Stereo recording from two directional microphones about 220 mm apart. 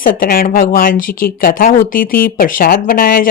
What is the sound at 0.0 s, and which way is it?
Speech, 40° left (ahead or behind).